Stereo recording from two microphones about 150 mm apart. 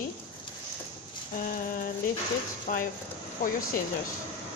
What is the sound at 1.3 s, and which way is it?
Female singing, 65° left (ahead or behind).